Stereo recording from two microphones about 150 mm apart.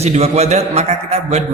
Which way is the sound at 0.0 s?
45° right (ahead or behind).